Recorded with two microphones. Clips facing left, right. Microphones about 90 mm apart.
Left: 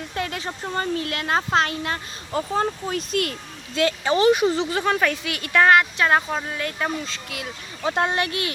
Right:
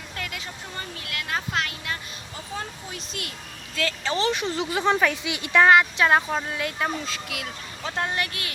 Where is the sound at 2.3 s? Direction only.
55° left (ahead or behind).